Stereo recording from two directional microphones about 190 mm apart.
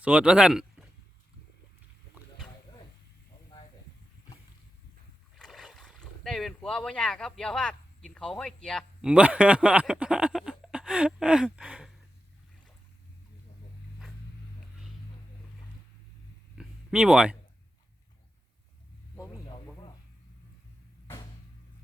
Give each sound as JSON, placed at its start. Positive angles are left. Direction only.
{"t": 0.0, "sound": "speech", "side_deg": -5}
{"t": 5.3, "sound": "speech", "side_deg": 0}
{"t": 16.6, "sound": "a sound", "side_deg": -5}